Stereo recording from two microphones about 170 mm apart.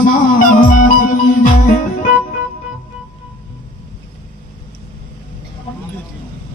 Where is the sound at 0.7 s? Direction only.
55° left (ahead or behind).